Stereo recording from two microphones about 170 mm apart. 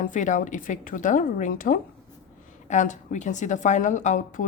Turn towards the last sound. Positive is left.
turn(degrees=45)  # may be behind; listen again after turning